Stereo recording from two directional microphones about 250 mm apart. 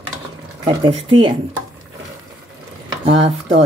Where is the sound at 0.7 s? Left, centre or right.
Right.